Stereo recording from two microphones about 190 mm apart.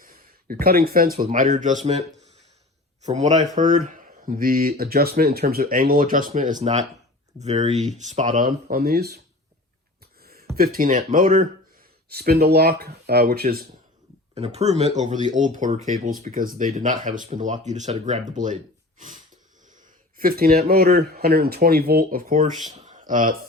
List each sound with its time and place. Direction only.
0.0 s a sound: 50° right (ahead or behind)
0.6 s speech: 55° right (ahead or behind); by 2.0 s 35° right (ahead or behind)
3.1 s speech: 35° right (ahead or behind); by 9.2 s 55° right (ahead or behind)
10.2 s a sound: 55° right (ahead or behind)
10.5 s speech: 50° right (ahead or behind)
14.3 s speech: 35° right (ahead or behind)